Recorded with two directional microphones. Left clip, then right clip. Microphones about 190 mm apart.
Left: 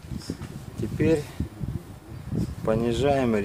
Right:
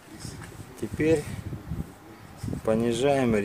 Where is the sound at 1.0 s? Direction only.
Centre (ahead or behind).